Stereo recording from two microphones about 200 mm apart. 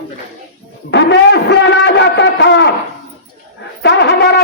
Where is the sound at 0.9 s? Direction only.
60° left (ahead or behind).